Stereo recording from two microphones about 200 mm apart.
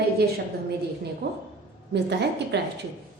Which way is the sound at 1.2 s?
50° right (ahead or behind).